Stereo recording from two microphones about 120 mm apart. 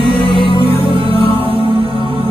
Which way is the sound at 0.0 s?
40° left (ahead or behind).